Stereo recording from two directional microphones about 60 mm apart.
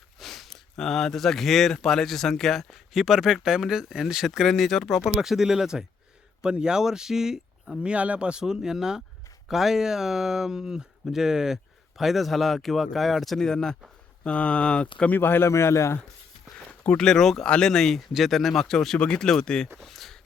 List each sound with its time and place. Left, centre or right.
0.2 s speech: centre
7.8 s speech: right; by 15.1 s centre
15.1 s a man's voice: left
16.8 s speech: centre
19.7 s a sound: centre